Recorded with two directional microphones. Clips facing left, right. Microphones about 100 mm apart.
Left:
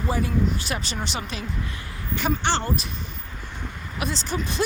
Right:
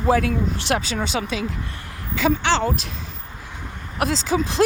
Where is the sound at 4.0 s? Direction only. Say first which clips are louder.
Right 7 dB; 90° right.